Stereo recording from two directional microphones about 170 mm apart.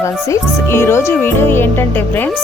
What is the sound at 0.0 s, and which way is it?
Speech, 15° left (ahead or behind).